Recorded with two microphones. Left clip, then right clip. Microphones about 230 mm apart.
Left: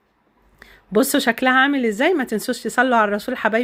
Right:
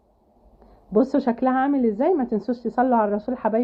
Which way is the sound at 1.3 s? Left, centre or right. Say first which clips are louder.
Left 5 dB; left.